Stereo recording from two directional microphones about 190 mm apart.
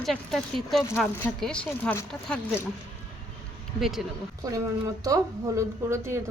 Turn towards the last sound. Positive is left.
turn(degrees=-15)  # may be behind; listen again after turning